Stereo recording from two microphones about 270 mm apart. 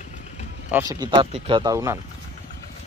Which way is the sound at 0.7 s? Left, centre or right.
Centre.